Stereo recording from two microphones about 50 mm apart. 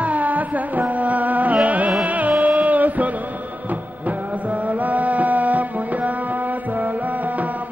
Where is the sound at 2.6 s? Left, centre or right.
Right.